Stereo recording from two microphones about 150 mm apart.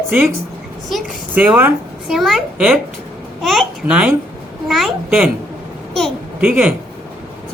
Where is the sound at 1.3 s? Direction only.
10° right (ahead or behind).